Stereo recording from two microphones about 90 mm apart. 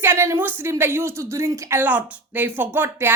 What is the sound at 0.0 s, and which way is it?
Speech, 25° right (ahead or behind).